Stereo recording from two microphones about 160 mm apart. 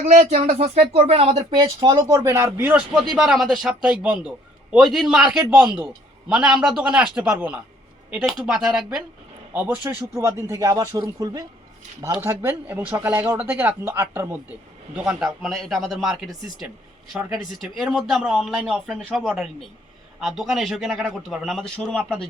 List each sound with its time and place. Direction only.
0.0 s speech: 45° right (ahead or behind)
1.4 s a man's voice: 30° right (ahead or behind)
14.9 s a man's voice: 5° right (ahead or behind)